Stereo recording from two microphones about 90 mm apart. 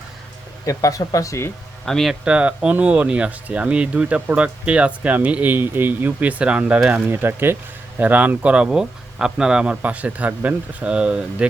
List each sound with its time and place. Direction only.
0.6 s speech: 40° left (ahead or behind)
1.8 s a man's voice: 5° left (ahead or behind)
2.2 s speech: 15° right (ahead or behind)
7.1 s speech: 25° right (ahead or behind)